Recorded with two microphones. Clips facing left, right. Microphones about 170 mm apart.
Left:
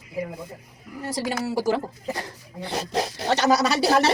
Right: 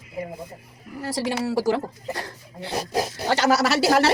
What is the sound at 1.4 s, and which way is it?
Speech, 20° left (ahead or behind).